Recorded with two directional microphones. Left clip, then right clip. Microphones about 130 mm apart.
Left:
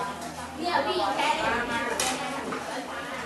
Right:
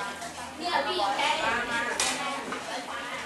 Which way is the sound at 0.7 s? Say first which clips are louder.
Left 1 dB; 15° right (ahead or behind).